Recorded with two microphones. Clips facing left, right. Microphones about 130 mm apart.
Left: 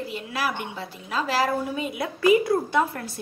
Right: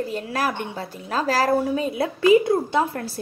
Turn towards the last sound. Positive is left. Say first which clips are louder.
# right 2 dB
turn(degrees=-30)  # may be behind; listen again after turning